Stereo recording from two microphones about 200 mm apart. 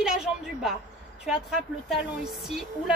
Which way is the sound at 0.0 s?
5° right (ahead or behind).